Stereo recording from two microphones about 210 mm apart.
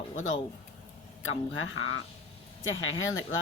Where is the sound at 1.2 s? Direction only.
70° left (ahead or behind).